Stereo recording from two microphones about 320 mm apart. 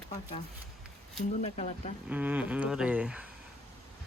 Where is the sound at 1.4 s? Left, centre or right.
Centre.